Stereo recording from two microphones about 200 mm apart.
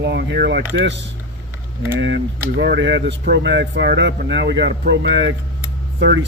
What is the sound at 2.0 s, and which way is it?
Speech, 60° right (ahead or behind).